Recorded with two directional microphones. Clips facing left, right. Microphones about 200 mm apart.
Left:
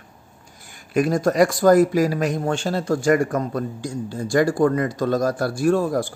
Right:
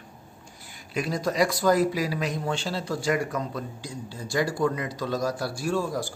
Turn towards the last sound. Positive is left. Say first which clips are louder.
# left 8 dB
turn(degrees=55)  # may be behind; listen again after turning